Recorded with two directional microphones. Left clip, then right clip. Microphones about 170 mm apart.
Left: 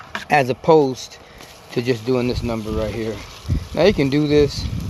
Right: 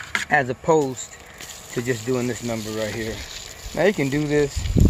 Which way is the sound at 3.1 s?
5° right (ahead or behind).